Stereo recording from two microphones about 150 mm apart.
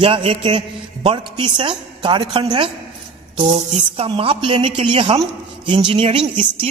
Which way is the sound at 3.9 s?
40° right (ahead or behind).